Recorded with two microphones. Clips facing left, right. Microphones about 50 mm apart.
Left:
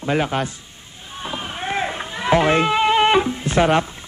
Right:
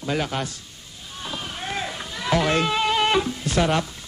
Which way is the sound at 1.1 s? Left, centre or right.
Left.